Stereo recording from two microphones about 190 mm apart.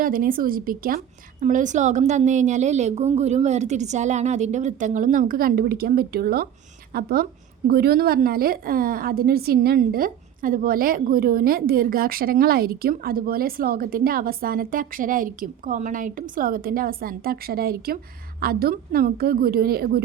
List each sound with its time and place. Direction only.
0.0 s a woman's voice: 45° right (ahead or behind)